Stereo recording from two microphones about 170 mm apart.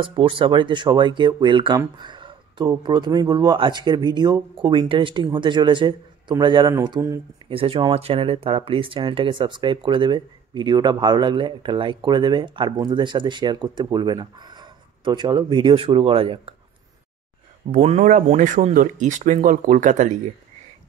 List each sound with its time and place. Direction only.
0.0 s speech: 30° right (ahead or behind)
7.4 s speech: 35° right (ahead or behind)
17.6 s speech: 40° right (ahead or behind)